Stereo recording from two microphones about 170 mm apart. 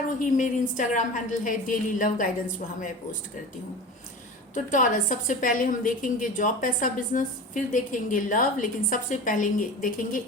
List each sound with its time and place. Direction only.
0.2 s a woman's voice: 50° left (ahead or behind)
4.5 s a woman's voice: 50° left (ahead or behind)